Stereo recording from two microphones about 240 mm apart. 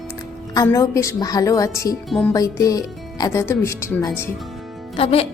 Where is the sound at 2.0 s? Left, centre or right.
Centre.